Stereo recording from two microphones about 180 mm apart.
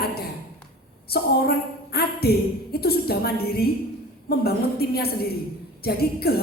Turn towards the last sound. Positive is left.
turn(degrees=60)  # may be behind; listen again after turning